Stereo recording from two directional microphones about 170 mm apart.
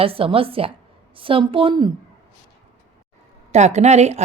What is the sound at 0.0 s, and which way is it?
Speech, 35° right (ahead or behind).